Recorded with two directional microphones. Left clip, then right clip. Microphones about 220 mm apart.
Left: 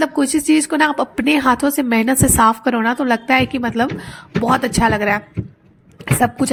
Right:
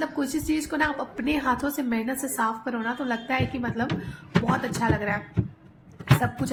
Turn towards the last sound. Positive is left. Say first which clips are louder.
# left 9 dB
turn(degrees=40)  # may be behind; listen again after turning